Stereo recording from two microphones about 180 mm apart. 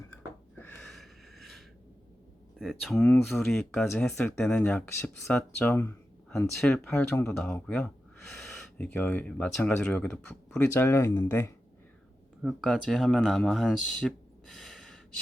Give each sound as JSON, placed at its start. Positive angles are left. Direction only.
{"t": 0.6, "sound": "a sound", "side_deg": 10}
{"t": 2.6, "sound": "speech", "side_deg": 0}
{"t": 12.4, "sound": "speech", "side_deg": 0}